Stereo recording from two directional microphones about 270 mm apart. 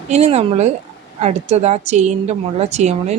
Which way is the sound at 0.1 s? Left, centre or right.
Right.